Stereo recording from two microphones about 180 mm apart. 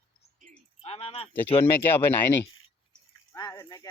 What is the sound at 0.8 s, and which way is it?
Speech, 35° left (ahead or behind).